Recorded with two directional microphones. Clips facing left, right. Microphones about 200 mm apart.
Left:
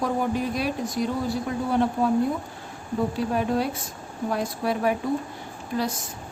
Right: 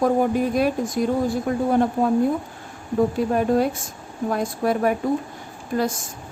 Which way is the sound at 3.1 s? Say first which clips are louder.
Right 3 dB; 50° right (ahead or behind).